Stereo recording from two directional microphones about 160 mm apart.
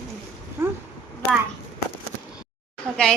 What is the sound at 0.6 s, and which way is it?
Speech, 15° right (ahead or behind).